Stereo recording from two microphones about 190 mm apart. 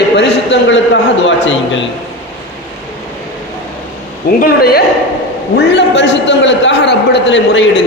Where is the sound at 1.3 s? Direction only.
80° left.